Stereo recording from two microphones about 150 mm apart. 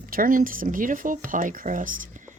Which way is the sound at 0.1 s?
70° right (ahead or behind).